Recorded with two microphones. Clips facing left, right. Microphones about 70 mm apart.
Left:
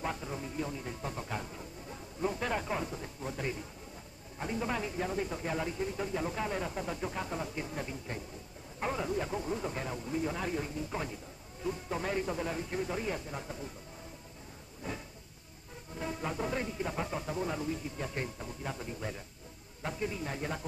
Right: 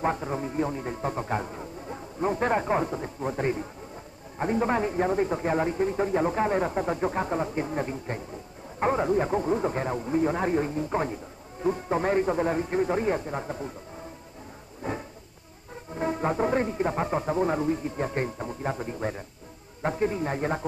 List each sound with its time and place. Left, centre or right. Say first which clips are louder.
0.0 s speech: right 10 dB; right
14.8 s a sound: right 8 dB; right
15.9 s speech: right 10 dB; right